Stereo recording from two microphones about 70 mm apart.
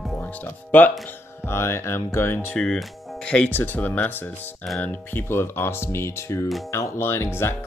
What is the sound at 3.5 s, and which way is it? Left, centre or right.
Speech, left.